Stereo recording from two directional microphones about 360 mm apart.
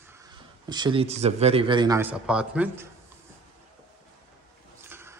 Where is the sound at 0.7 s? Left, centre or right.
Centre.